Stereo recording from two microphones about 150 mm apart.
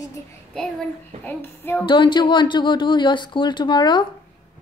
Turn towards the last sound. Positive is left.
turn(degrees=30)  # may be behind; listen again after turning